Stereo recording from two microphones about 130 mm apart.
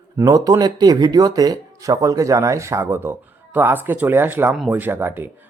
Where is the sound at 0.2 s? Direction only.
25° right (ahead or behind).